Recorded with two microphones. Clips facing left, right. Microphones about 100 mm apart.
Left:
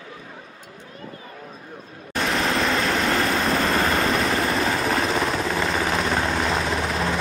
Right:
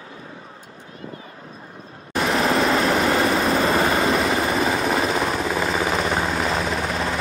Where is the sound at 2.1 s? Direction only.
Centre (ahead or behind).